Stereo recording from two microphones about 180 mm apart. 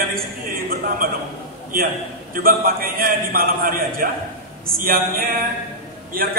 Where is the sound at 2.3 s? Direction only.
50° right (ahead or behind).